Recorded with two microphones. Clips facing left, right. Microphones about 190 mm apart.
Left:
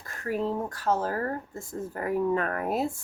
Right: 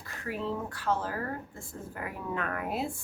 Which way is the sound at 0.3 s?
45° left (ahead or behind).